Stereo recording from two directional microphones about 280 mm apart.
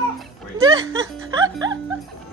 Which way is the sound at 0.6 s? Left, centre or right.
Centre.